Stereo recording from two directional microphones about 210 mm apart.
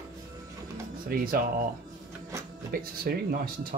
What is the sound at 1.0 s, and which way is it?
Speech, 45° right (ahead or behind).